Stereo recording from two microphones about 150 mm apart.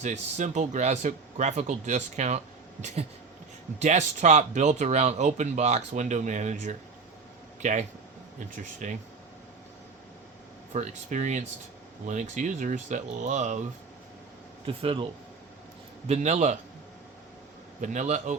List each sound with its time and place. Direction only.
0.0 s speech: 55° right (ahead or behind)
10.7 s speech: 50° right (ahead or behind)
14.7 s speech: 40° right (ahead or behind)
16.0 s speech: 45° right (ahead or behind)
17.7 s speech: 55° right (ahead or behind)